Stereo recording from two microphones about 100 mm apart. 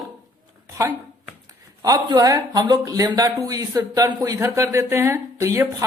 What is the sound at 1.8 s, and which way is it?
Speech, 40° right (ahead or behind).